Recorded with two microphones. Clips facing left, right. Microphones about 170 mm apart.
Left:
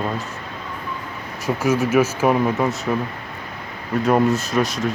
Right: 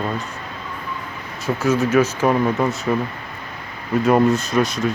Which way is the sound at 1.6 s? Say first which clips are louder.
Right 1 dB; 10° left (ahead or behind).